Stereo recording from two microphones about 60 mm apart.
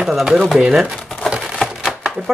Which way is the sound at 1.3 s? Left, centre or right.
Centre.